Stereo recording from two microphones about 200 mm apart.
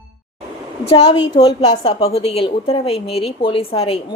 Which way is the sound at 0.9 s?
30° left (ahead or behind).